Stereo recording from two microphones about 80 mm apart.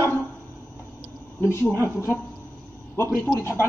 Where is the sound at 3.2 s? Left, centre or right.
Left.